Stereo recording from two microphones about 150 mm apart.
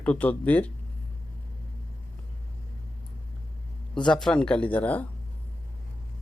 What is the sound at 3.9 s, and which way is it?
Speech, 5° left (ahead or behind).